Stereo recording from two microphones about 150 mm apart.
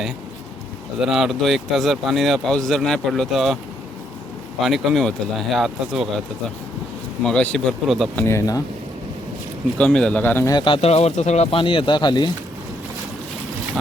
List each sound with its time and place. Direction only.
1.0 s speech: 5° right (ahead or behind)
4.6 s speech: centre (ahead or behind)
7.2 s speech: 5° left (ahead or behind)
8.1 s speech: 15° left (ahead or behind)
9.7 s speech: 5° left (ahead or behind)
10.5 s speech: 35° left (ahead or behind); by 11.4 s 50° left (ahead or behind)
11.5 s speech: 35° left (ahead or behind)